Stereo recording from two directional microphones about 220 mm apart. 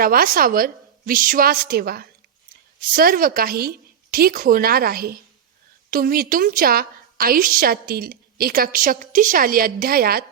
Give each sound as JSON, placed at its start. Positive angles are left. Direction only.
{"t": 0.0, "sound": "a woman's voice", "side_deg": -40}